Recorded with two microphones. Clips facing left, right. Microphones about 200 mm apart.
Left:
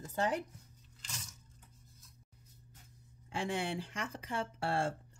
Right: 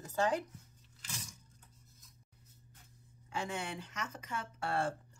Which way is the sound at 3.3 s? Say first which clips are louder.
Left 3 dB; 30° left (ahead or behind).